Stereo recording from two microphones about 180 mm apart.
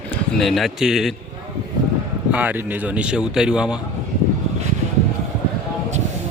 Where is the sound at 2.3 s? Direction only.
10° right (ahead or behind).